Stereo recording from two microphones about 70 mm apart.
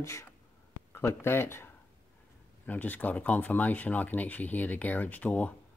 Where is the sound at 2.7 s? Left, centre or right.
Left.